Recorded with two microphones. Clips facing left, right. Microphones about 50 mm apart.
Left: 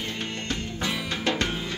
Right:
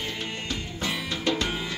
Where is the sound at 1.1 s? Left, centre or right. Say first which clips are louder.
Even; left.